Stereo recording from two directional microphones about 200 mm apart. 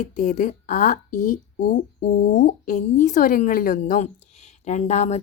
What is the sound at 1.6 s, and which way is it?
Speech, 50° left (ahead or behind).